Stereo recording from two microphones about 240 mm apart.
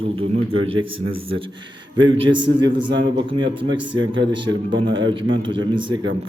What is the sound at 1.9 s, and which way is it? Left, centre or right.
Speech, right.